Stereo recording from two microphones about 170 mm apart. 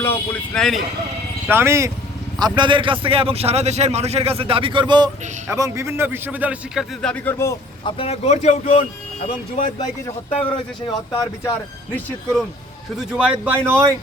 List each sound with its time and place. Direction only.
0.0 s speech: 15° left (ahead or behind)
1.5 s speech: 15° right (ahead or behind)
2.4 s a man's voice: 30° right (ahead or behind); by 6.8 s 10° right (ahead or behind)
7.0 s speech: 10° left (ahead or behind)
7.9 s speech: 35° left (ahead or behind)
10.9 s speech: 20° left (ahead or behind)
11.9 s speech: 5° left (ahead or behind); by 13.9 s 15° right (ahead or behind)